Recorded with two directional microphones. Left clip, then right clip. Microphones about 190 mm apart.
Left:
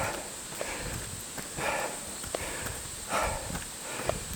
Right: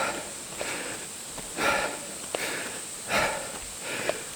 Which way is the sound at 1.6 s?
45° right (ahead or behind).